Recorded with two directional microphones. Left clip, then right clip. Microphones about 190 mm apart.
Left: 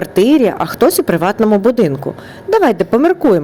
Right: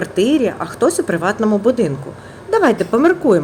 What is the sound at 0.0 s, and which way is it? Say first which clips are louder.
A woman's voice: left 5 dB; 35° left (ahead or behind).